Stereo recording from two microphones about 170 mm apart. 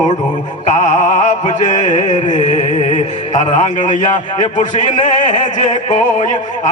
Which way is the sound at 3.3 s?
45° left (ahead or behind).